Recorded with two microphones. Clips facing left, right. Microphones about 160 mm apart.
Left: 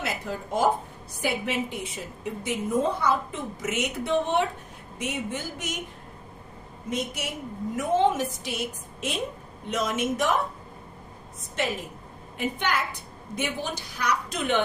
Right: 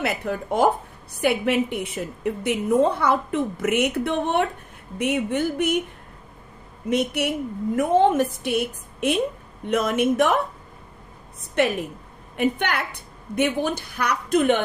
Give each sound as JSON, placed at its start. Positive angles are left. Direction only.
{"t": 0.0, "sound": "a woman's voice", "side_deg": -60}
{"t": 6.9, "sound": "a woman's voice", "side_deg": -65}
{"t": 12.4, "sound": "a woman's voice", "side_deg": -60}